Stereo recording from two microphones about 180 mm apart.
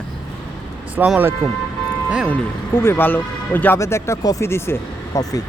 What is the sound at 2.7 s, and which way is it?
Speech, 10° left (ahead or behind).